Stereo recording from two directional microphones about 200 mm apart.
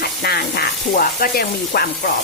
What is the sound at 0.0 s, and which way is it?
Sizzle, 50° left (ahead or behind).